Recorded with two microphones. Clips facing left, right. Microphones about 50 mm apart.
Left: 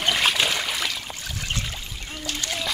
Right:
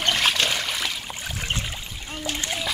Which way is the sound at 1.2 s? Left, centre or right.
Right.